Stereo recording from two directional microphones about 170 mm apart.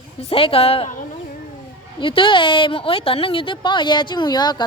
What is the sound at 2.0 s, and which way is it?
A woman's voice, 30° left (ahead or behind).